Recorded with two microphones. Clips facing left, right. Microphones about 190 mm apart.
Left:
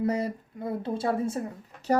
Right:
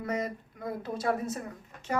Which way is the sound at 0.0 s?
30° left (ahead or behind).